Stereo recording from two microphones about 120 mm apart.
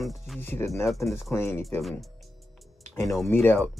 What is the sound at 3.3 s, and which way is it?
Speech, 15° left (ahead or behind).